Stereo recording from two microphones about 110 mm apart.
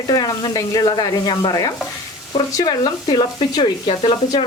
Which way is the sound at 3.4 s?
45° left (ahead or behind).